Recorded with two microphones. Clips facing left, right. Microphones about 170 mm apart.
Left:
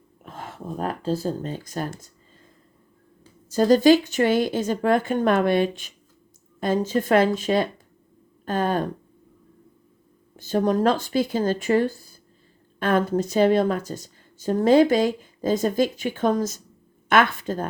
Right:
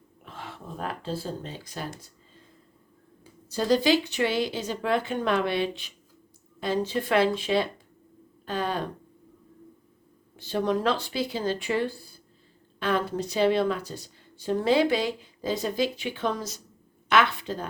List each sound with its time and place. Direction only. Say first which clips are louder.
0.3 s speech: left 6 dB; 45° left (ahead or behind)
3.5 s a woman's voice: left 7 dB; 45° left (ahead or behind)
10.3 s a woman's voice: left 5 dB; 45° left (ahead or behind)